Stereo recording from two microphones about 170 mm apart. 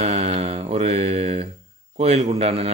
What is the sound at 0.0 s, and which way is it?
Mantra, 40° right (ahead or behind).